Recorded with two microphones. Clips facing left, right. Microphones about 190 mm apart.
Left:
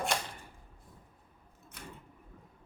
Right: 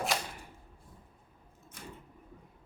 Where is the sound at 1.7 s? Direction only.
65° left (ahead or behind).